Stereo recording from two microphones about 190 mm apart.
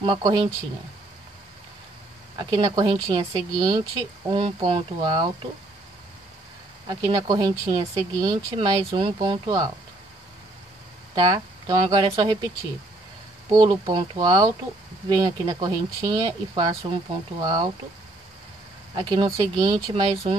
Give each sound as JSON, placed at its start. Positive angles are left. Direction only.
{"t": 0.0, "sound": "speech", "side_deg": -25}
{"t": 2.5, "sound": "speech", "side_deg": -20}
{"t": 6.9, "sound": "speech", "side_deg": -20}
{"t": 11.1, "sound": "speech", "side_deg": -25}
{"t": 13.5, "sound": "speech", "side_deg": -20}
{"t": 18.9, "sound": "speech", "side_deg": -25}